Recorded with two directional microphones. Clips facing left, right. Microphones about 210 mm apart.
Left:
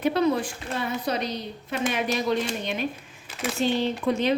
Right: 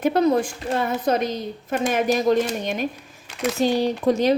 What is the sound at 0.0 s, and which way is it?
A woman's voice, 45° right (ahead or behind).